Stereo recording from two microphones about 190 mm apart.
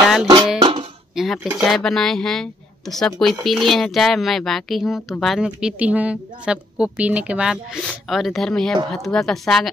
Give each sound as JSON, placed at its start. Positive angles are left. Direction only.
{"t": 0.0, "sound": "music", "side_deg": 0}
{"t": 0.6, "sound": "a sound", "side_deg": -25}
{"t": 1.1, "sound": "speech", "side_deg": 0}